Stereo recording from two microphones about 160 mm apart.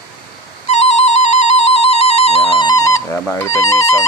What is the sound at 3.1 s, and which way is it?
Speech, 15° left (ahead or behind).